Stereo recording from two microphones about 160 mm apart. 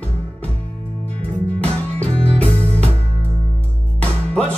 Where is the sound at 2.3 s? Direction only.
40° right (ahead or behind).